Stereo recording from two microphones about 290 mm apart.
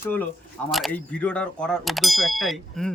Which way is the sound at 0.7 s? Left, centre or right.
Centre.